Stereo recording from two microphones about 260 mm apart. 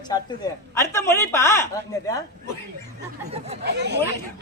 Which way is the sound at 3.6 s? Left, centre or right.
Right.